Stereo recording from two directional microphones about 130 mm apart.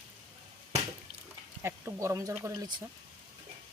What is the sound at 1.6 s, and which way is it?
Speech, 20° right (ahead or behind).